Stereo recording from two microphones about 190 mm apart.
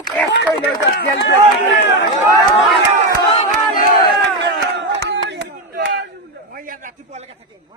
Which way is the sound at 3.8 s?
55° left (ahead or behind).